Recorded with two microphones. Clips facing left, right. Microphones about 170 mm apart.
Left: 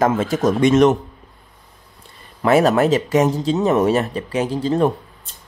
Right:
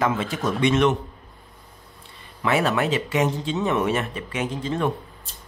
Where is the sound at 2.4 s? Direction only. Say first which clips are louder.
Left 7 dB; 40° left (ahead or behind).